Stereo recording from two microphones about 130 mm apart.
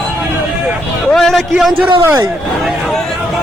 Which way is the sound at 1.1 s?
Centre (ahead or behind).